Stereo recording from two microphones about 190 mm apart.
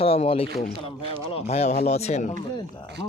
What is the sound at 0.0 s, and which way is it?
Speech, 30° left (ahead or behind).